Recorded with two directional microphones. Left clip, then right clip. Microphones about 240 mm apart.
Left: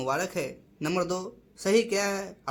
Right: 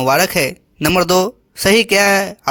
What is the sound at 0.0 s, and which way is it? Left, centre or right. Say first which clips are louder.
A man's voice: right 15 dB; right.